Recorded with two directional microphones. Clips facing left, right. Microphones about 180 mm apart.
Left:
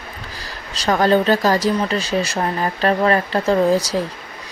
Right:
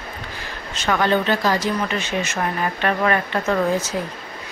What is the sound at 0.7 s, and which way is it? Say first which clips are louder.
Speech: left 4 dB; 35° left (ahead or behind).